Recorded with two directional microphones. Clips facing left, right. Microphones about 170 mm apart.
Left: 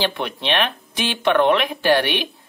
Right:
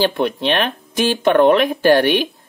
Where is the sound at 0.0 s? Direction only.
45° right (ahead or behind).